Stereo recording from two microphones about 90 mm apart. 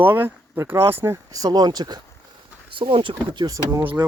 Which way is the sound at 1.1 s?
45° right (ahead or behind).